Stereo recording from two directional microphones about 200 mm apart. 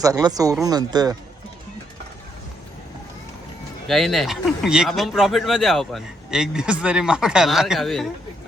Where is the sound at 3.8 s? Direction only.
Centre (ahead or behind).